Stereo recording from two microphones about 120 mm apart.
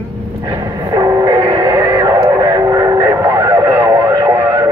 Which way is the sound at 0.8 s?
30° right (ahead or behind).